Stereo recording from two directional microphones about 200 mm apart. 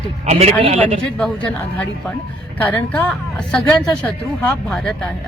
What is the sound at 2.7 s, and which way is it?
Speech, 10° left (ahead or behind).